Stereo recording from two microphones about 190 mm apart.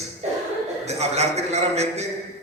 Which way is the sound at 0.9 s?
35° right (ahead or behind).